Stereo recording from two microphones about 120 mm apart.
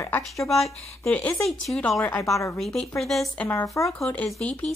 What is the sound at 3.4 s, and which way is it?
Speech, 25° left (ahead or behind).